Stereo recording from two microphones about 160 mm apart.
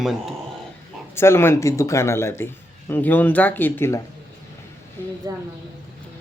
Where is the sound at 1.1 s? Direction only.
15° left (ahead or behind).